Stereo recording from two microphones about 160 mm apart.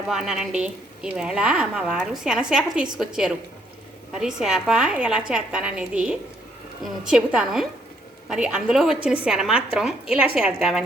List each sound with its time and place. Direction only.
0.1 s a woman's voice: 5° right (ahead or behind)